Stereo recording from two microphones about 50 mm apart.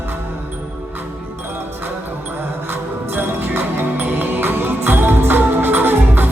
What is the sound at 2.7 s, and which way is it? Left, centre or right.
Music, right.